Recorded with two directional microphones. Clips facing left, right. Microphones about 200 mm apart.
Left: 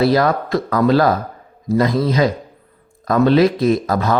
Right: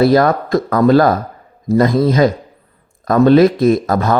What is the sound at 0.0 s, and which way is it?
Speech, 50° right (ahead or behind).